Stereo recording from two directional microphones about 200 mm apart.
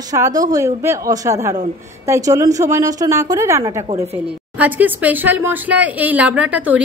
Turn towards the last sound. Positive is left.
turn(degrees=-5)  # may be behind; listen again after turning